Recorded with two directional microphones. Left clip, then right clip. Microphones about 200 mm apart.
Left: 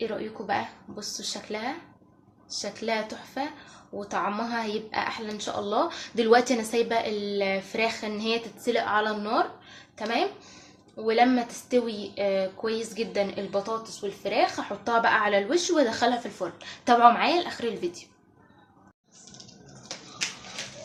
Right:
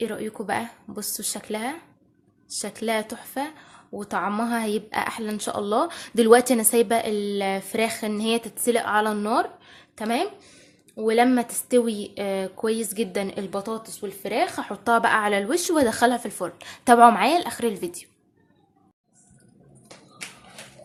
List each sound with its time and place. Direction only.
0.0 s speech: 50° right (ahead or behind)